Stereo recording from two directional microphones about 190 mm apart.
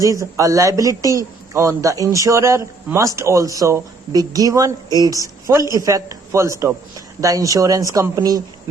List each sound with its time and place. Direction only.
0.0 s a man's voice: 15° right (ahead or behind)